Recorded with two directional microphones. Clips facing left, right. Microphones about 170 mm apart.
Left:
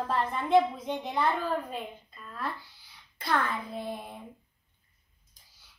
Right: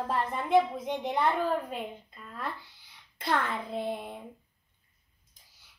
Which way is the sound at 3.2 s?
25° right (ahead or behind).